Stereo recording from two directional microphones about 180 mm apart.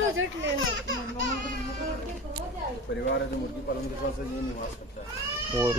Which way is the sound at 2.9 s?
85° left.